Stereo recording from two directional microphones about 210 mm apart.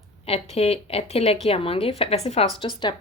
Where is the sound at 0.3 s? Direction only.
30° left (ahead or behind).